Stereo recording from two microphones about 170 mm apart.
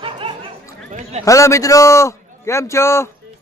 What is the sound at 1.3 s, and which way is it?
A man's voice, 20° left (ahead or behind).